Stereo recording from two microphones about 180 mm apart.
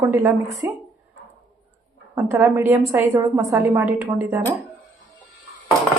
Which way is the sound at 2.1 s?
15° right (ahead or behind).